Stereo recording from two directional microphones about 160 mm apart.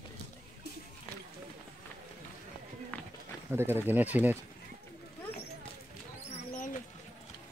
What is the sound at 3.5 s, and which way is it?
Speech, 15° right (ahead or behind).